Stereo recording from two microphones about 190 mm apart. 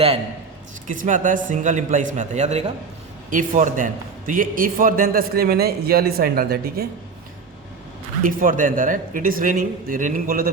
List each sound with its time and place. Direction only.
0.9 s a man's voice: 45° right (ahead or behind)
8.2 s a man's voice: 45° right (ahead or behind)